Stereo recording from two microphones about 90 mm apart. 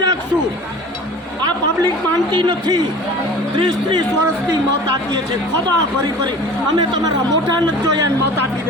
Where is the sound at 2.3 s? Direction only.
55° right (ahead or behind).